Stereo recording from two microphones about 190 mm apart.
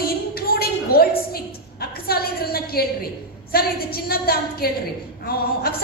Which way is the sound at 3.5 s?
50° left (ahead or behind).